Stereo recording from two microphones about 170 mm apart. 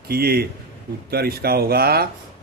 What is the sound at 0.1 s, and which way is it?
A man's voice, 65° right (ahead or behind).